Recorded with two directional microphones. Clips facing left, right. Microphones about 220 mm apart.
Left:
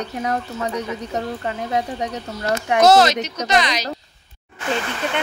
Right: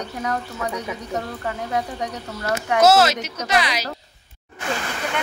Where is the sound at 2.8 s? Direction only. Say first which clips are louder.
Left 2 dB; 5° right (ahead or behind).